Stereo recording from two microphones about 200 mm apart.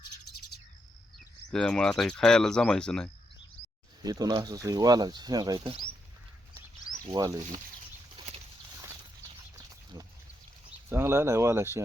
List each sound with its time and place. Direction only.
1.5 s speech: 5° left (ahead or behind)
4.0 s speech: 20° right (ahead or behind)
7.1 s speech: 20° right (ahead or behind)
10.8 s speech: 15° right (ahead or behind)